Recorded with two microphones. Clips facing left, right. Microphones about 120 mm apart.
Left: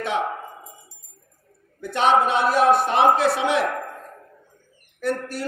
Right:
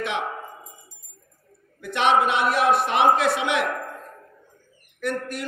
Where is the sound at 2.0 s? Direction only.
35° left (ahead or behind).